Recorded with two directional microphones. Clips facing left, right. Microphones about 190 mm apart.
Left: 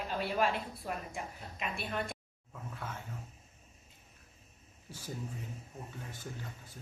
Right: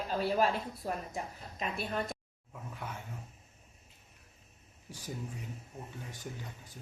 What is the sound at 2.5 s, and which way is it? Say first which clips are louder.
Speech: even; 15° right (ahead or behind).